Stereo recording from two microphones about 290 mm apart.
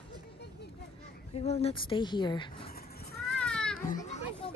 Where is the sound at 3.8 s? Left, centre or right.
Left.